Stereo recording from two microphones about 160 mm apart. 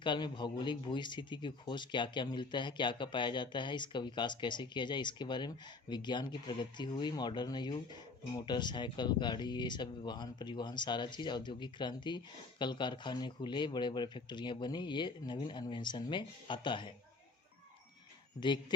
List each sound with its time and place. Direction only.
0.0 s speech: 30° left (ahead or behind)
18.3 s speech: 30° left (ahead or behind)